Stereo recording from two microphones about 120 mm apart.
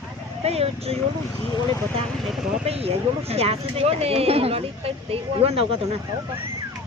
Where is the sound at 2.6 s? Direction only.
55° right (ahead or behind).